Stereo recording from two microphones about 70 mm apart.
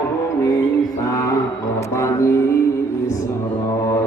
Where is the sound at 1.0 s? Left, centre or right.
Left.